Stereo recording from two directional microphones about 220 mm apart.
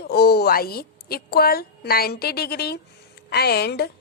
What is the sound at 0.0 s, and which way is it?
A woman's voice, 45° left (ahead or behind).